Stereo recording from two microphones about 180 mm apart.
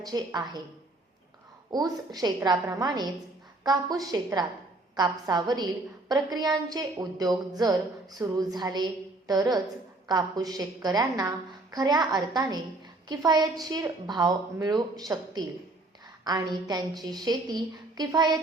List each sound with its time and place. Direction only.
0.1 s speech: 20° right (ahead or behind)
1.7 s speech: 20° right (ahead or behind)